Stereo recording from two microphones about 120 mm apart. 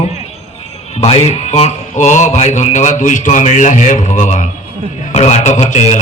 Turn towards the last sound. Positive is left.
turn(degrees=70)  # may be behind; listen again after turning